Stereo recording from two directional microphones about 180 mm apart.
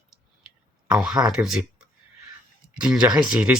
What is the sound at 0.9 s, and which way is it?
Speech, 5° right (ahead or behind).